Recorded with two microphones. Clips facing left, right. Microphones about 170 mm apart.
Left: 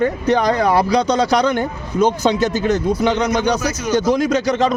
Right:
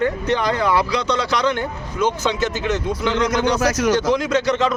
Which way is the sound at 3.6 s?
90° right.